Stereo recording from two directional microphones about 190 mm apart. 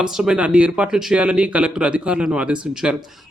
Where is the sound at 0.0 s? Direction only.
5° right (ahead or behind).